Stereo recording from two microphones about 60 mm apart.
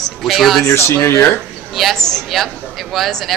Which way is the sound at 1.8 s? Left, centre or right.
Centre.